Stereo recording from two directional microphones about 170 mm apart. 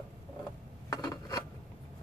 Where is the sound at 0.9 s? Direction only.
25° left (ahead or behind).